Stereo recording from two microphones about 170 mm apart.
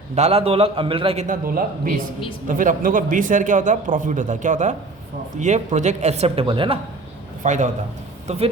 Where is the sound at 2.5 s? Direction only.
50° right (ahead or behind); by 6.7 s 30° right (ahead or behind).